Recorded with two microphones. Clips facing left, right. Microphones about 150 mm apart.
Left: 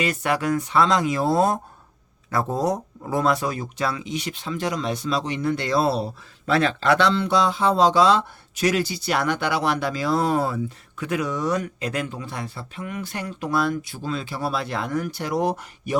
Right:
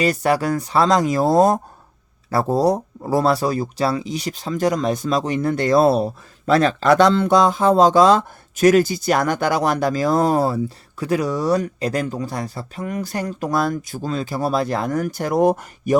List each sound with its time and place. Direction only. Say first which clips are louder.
0.0 s speech: right 5 dB; 35° right (ahead or behind)